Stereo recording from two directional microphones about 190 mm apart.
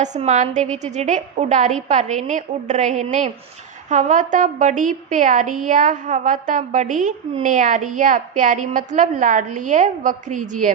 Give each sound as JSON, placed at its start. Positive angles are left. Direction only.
{"t": 0.0, "sound": "a woman's voice", "side_deg": -40}